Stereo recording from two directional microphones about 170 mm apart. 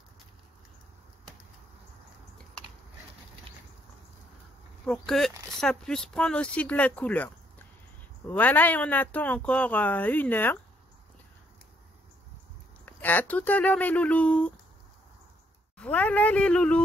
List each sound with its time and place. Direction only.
4.8 s speech: 5° left (ahead or behind)
8.3 s speech: 10° left (ahead or behind)
12.8 s speech: 10° left (ahead or behind)
15.8 s speech: 5° left (ahead or behind)